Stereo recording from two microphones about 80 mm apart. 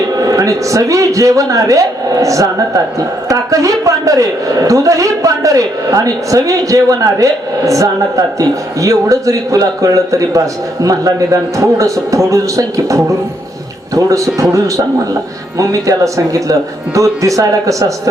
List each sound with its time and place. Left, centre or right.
0.1 s a man's voice: right
15.5 s a man's voice: right